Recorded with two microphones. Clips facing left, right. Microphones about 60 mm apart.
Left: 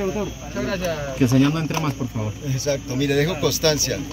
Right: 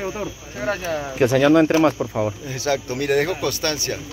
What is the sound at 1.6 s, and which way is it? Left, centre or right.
Speech, right.